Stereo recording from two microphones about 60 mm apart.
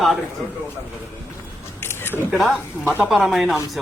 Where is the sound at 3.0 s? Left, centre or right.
Centre.